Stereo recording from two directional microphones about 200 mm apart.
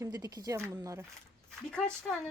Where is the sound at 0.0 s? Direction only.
20° right (ahead or behind).